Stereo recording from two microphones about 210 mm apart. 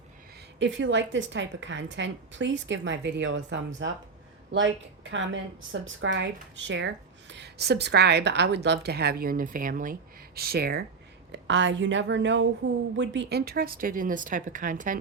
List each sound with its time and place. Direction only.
0.6 s a woman's voice: 60° right (ahead or behind); by 14.9 s 40° right (ahead or behind)